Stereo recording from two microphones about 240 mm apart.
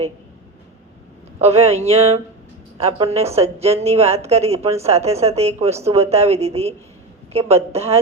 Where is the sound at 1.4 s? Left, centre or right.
Right.